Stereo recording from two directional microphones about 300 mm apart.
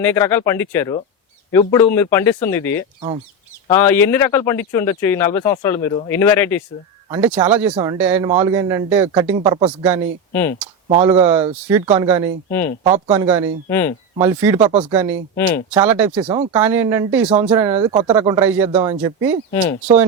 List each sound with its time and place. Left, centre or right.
0.0 s speech: centre
7.1 s speech: centre
12.5 s speech: centre
12.8 s speech: centre
13.7 s speech: centre
14.3 s speech: centre
17.7 s speech: centre
18.3 s speech: centre
19.8 s speech: centre